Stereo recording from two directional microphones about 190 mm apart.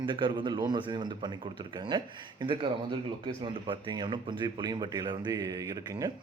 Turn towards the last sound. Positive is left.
turn(degrees=-20)  # may be behind; listen again after turning